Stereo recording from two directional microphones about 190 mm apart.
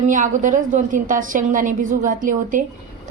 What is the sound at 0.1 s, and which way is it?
A woman's voice, 40° right (ahead or behind).